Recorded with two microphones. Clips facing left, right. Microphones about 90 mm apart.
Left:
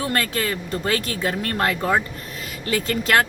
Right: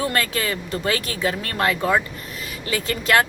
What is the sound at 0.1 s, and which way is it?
Speech, 45° left (ahead or behind).